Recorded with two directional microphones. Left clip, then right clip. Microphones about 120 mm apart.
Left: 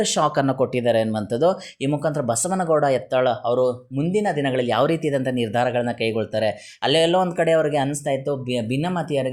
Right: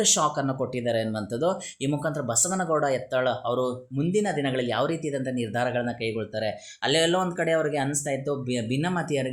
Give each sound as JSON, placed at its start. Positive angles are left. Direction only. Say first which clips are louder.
{"t": 0.0, "sound": "speech", "louder": "left 3 dB", "side_deg": 35}
{"t": 0.3, "sound": "speech", "louder": "left 8 dB", "side_deg": 50}
{"t": 7.0, "sound": "speech", "louder": "left 5 dB", "side_deg": 35}
{"t": 7.4, "sound": "speech", "louder": "left 6 dB", "side_deg": 45}